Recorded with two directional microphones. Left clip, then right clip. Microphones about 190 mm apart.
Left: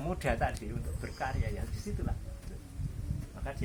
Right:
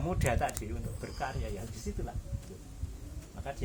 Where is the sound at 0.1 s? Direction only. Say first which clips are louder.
Right 1 dB; 50° right (ahead or behind).